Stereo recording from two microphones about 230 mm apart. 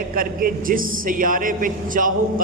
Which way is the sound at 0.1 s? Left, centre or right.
Right.